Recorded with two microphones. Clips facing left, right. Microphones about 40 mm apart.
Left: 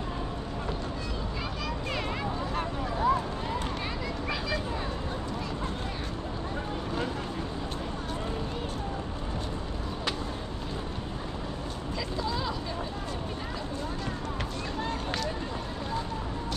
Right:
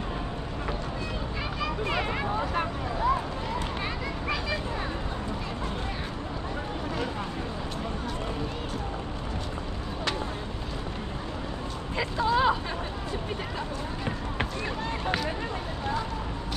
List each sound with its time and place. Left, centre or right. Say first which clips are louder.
1.6 s children playing: right 6 dB; right
12.0 s vehicle: right 9 dB; right